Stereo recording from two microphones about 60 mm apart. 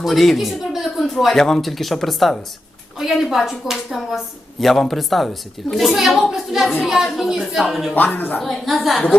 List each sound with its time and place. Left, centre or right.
0.0 s a woman's voice: centre
7.9 s speech: left
8.4 s a woman's voice: centre